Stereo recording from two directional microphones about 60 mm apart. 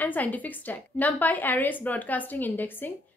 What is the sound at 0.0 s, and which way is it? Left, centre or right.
A woman's voice, left.